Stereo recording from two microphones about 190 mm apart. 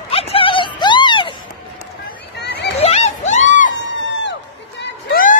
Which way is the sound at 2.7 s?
35° left (ahead or behind).